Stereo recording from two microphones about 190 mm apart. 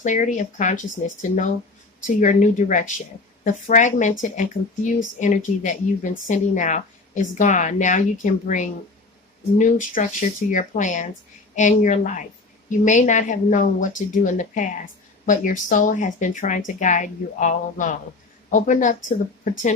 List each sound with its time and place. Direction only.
0.0 s speech: 40° left (ahead or behind)
2.0 s speech: 40° left (ahead or behind)